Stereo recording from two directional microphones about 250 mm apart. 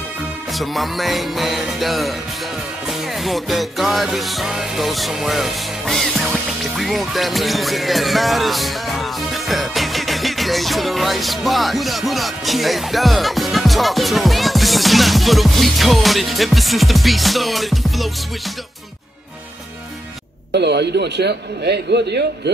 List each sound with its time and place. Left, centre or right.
0.5 s music: centre
20.5 s a man's voice: right